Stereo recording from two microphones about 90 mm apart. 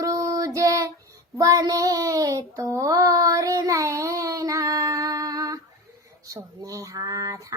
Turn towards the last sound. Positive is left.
turn(degrees=-40)  # may be behind; listen again after turning